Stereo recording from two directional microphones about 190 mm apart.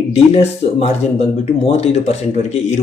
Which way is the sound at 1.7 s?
35° left (ahead or behind).